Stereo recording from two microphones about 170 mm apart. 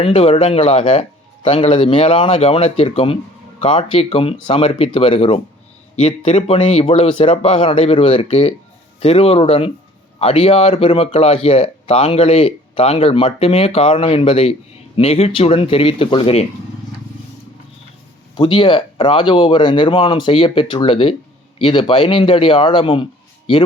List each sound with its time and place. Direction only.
0.0 s speech: 35° left (ahead or behind)
18.3 s speech: 30° left (ahead or behind)